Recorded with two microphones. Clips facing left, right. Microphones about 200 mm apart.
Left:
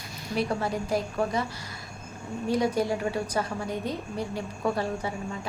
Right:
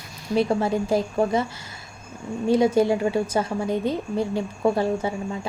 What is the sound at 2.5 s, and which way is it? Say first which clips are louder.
A woman's voice: right 7 dB; 25° right (ahead or behind).